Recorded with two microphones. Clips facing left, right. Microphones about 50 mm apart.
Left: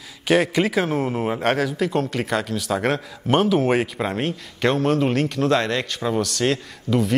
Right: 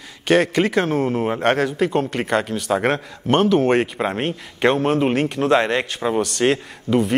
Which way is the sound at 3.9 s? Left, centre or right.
Centre.